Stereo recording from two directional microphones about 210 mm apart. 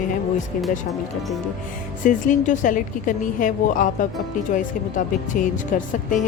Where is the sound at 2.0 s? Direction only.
35° left (ahead or behind).